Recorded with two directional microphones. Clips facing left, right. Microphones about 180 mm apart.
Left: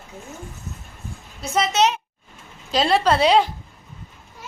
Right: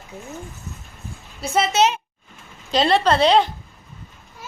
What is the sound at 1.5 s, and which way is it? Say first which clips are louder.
A woman's voice: right 1 dB; 5° right (ahead or behind).